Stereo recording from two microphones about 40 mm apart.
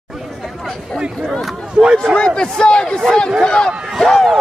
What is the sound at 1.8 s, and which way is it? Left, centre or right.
Speech, centre.